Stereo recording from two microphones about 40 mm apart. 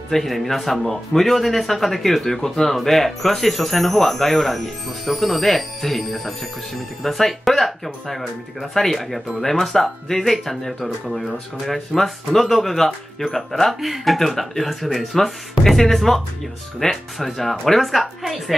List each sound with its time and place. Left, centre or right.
0.1 s a man's voice: centre
13.7 s a man's voice: centre